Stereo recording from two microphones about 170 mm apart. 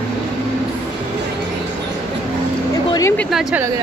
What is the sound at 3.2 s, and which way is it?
Speech, centre (ahead or behind).